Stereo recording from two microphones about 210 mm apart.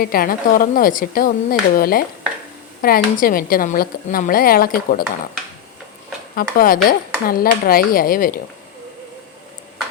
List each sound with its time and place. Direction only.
0.0 s a woman's voice: 45° left (ahead or behind)
6.3 s a woman's voice: 40° left (ahead or behind)